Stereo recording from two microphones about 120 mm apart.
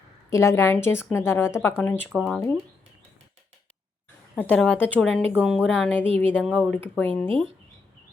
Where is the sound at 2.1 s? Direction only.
Centre (ahead or behind).